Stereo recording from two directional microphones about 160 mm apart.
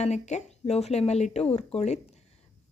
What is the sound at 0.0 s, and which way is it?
Speech, 45° left (ahead or behind).